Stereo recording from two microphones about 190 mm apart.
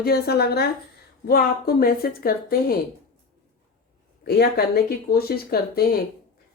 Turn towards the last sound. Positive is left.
turn(degrees=55)  # may be behind; listen again after turning